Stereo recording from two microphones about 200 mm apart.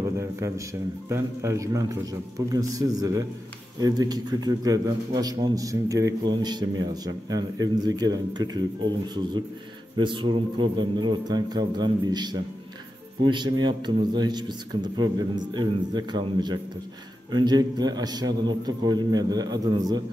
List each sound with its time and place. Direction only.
1.0 s a man's voice: 15° right (ahead or behind)